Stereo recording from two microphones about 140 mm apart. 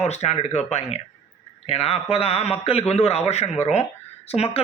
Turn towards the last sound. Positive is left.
turn(degrees=50)  # may be behind; listen again after turning